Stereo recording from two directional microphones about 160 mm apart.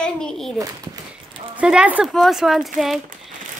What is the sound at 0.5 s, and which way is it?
Speech, 20° right (ahead or behind).